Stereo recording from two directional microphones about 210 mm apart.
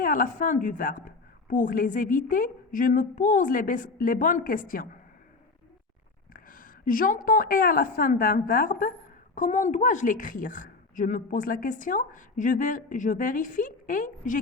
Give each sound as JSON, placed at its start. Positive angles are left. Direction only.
{"t": 0.0, "sound": "a woman's voice", "side_deg": 40}
{"t": 6.3, "sound": "a woman's voice", "side_deg": 40}